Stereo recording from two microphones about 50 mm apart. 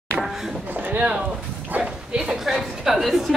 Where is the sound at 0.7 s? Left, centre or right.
Right.